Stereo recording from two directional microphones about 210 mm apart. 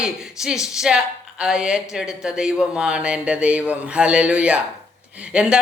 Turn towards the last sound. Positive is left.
turn(degrees=-5)  # may be behind; listen again after turning